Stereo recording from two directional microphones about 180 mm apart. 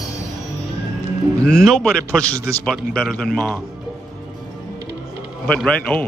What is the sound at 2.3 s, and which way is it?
Speech, 15° right (ahead or behind).